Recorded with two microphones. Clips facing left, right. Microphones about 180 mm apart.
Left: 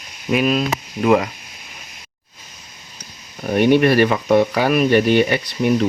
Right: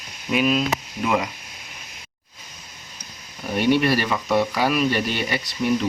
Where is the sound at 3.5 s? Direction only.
55° left (ahead or behind).